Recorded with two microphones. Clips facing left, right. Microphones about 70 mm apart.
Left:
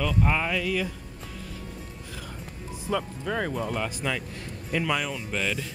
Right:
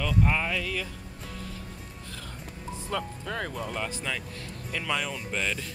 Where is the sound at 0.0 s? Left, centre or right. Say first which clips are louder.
Left 1 dB; centre.